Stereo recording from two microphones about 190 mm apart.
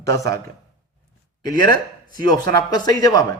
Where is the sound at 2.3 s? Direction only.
20° left (ahead or behind).